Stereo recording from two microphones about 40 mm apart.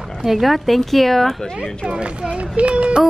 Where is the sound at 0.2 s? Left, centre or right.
Centre.